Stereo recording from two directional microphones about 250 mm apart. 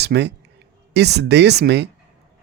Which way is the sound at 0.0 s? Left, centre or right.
Right.